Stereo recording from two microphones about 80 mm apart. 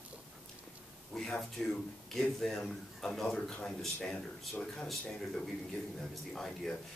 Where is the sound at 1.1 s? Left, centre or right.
Centre.